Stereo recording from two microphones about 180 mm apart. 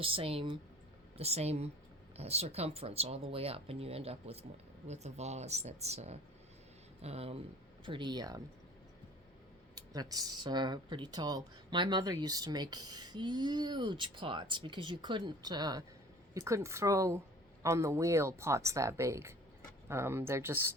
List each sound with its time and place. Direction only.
0.0 s speech: 30° right (ahead or behind)
9.7 s speech: 20° right (ahead or behind)